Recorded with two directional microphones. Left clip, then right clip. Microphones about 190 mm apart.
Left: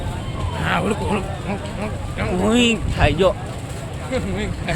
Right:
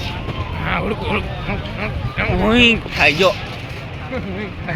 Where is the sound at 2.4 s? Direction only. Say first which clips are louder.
Right 4 dB; 5° right (ahead or behind).